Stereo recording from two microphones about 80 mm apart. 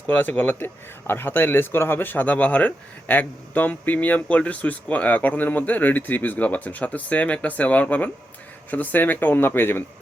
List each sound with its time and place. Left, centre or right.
0.1 s speech: left